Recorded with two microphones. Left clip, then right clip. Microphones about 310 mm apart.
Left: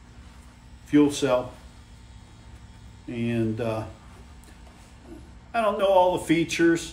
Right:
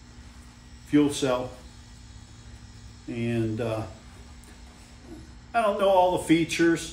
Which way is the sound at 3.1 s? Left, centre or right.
Centre.